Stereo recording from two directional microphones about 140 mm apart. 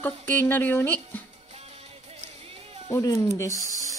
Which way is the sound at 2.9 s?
20° left (ahead or behind).